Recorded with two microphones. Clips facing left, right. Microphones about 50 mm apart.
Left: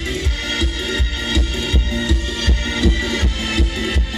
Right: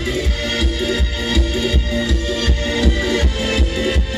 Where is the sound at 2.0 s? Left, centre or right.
Right.